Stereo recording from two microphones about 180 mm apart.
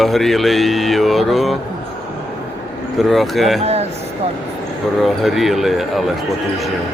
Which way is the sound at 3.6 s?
35° right (ahead or behind).